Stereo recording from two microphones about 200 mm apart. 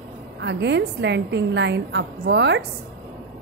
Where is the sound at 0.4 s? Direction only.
60° right (ahead or behind).